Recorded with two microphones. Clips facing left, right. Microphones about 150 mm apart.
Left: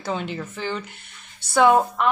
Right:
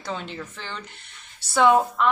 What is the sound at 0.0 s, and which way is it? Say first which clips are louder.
Speech: left 4 dB; 5° left (ahead or behind).